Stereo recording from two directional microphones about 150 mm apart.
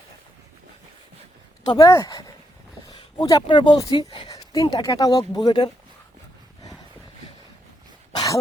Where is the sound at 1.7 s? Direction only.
25° left (ahead or behind).